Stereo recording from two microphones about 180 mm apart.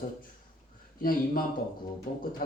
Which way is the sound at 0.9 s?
55° left (ahead or behind).